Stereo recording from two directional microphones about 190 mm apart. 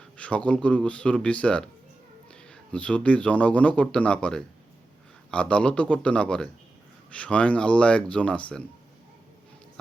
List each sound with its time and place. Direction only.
0.2 s speech: 5° left (ahead or behind)